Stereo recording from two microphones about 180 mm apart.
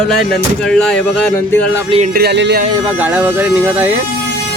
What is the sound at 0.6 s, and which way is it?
Speech, 5° left (ahead or behind).